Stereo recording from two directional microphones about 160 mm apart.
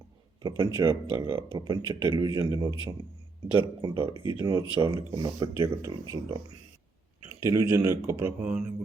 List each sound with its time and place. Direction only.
0.4 s speech: 25° right (ahead or behind)
1.5 s speech: 25° right (ahead or behind); by 8.7 s 10° right (ahead or behind)